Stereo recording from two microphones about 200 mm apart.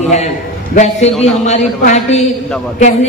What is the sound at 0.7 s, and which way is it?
A man's voice, 35° left (ahead or behind).